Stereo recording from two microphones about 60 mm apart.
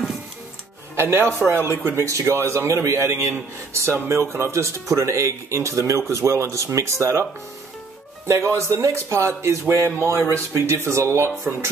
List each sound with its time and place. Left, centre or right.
0.9 s speech: right
2.0 s speech: right
8.3 s speech: right